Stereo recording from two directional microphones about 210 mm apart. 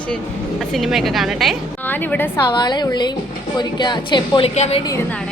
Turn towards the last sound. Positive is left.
turn(degrees=30)  # may be behind; listen again after turning